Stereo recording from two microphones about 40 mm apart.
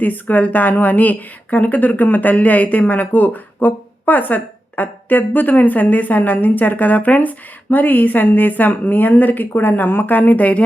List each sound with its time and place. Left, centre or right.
0.0 s speech: left